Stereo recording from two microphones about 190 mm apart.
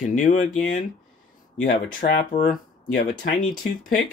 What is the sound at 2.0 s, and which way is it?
Speech, 45° left (ahead or behind).